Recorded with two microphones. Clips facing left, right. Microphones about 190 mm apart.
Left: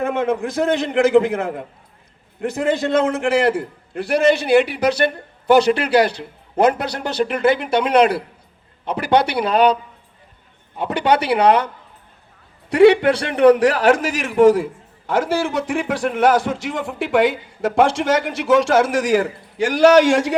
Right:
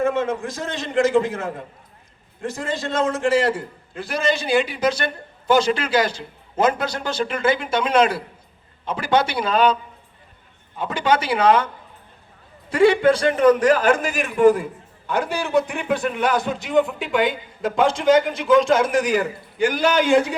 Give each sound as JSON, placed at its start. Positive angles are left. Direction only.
{"t": 0.0, "sound": "a man's voice", "side_deg": 60}
{"t": 10.8, "sound": "a man's voice", "side_deg": 65}
{"t": 12.7, "sound": "a man's voice", "side_deg": 70}